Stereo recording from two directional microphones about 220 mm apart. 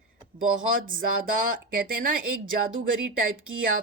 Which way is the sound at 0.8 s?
40° right (ahead or behind).